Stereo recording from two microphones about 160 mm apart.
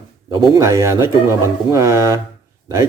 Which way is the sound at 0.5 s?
20° right (ahead or behind).